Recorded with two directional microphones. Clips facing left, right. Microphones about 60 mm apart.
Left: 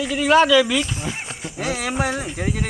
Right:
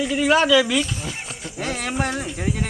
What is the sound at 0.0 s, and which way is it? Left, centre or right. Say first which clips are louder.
Speech: left 2 dB; centre.